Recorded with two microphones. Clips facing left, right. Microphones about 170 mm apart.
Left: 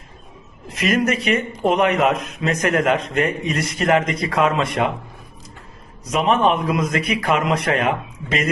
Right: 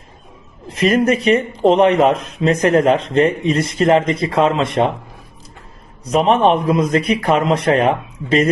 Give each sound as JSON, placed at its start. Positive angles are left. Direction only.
{"t": 0.7, "sound": "a man's voice", "side_deg": -30}
{"t": 6.1, "sound": "speech", "side_deg": -35}